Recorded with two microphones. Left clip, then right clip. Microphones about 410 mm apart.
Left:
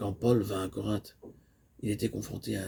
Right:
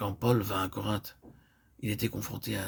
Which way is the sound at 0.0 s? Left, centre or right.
Right.